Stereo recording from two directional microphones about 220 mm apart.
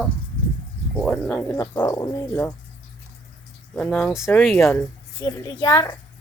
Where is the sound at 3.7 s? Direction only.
5° left (ahead or behind).